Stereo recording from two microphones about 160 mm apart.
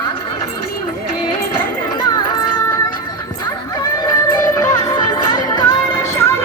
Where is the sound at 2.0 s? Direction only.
25° left (ahead or behind).